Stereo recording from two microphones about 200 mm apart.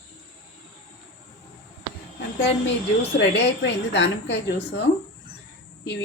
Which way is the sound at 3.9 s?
60° left (ahead or behind).